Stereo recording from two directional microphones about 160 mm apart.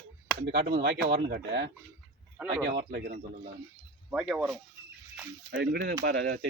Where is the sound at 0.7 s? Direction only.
80° right.